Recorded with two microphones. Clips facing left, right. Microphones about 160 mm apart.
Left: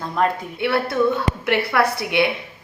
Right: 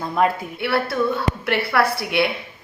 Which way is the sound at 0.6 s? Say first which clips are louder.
Left 2 dB; 20° left (ahead or behind).